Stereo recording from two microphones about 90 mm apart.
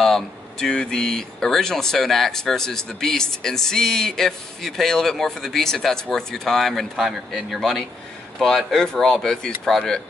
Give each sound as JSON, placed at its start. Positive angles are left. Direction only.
{"t": 0.0, "sound": "speech", "side_deg": 5}